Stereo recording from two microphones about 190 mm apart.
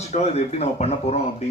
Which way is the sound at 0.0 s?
35° left (ahead or behind).